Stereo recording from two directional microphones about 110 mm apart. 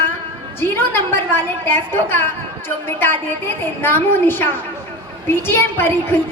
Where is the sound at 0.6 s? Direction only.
20° left (ahead or behind).